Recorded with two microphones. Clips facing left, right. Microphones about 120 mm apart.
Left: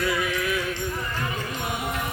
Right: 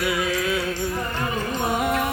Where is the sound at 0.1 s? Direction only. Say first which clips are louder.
Right 2 dB; 25° right (ahead or behind).